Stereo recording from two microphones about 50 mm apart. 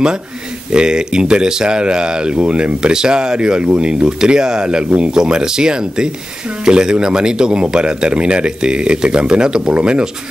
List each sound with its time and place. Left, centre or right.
0.7 s speech: centre